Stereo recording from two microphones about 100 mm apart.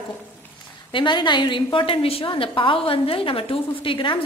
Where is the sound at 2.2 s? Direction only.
60° left (ahead or behind).